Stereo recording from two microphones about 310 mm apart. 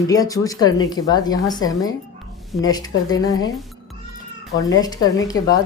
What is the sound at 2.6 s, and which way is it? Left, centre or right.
Speech, centre.